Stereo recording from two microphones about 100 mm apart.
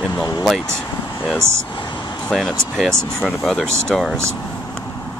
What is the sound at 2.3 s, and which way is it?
Speech, 5° left (ahead or behind).